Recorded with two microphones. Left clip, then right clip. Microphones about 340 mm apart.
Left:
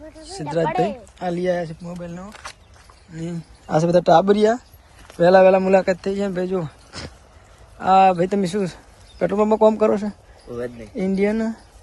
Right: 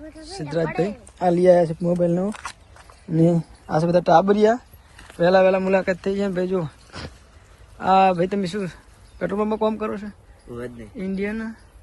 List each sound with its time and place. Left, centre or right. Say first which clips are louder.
0.6 s speech: left 3 dB; centre
1.9 s speech: right 13 dB; right
3.2 s a man's voice: right 14 dB; centre
3.7 s speech: left 2 dB; centre